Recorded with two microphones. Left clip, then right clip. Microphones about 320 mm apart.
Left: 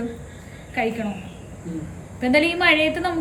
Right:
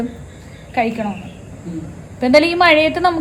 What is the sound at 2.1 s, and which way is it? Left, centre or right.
Speech, centre.